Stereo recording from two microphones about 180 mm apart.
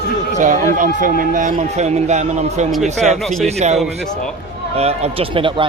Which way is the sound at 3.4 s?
35° right (ahead or behind).